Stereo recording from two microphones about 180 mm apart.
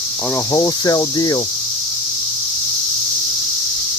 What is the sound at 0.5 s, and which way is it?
Speech, 20° left (ahead or behind).